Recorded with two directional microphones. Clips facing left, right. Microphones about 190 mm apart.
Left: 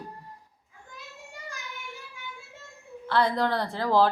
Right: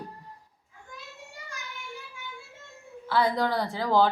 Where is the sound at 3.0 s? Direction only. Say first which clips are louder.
Even; 5° right (ahead or behind).